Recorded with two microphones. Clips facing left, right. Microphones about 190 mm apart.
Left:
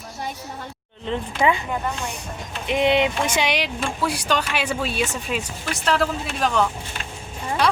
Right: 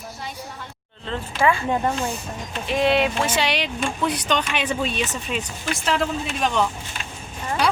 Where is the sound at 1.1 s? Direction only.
20° left (ahead or behind).